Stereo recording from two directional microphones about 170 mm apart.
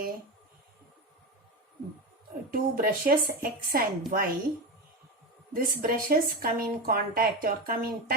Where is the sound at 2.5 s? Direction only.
55° right (ahead or behind).